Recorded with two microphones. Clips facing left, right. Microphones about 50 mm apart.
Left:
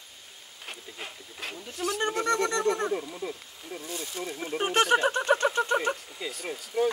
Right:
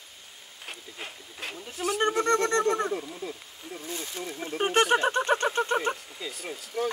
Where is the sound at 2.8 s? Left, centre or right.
Centre.